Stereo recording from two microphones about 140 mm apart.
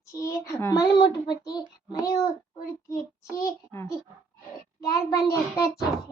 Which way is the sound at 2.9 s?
25° left (ahead or behind).